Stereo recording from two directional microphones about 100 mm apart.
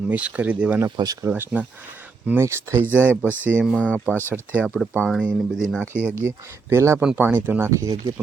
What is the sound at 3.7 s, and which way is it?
Speech, 15° left (ahead or behind).